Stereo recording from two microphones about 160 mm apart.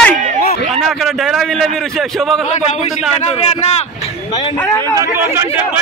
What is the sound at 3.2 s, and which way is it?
Speech, 45° left (ahead or behind).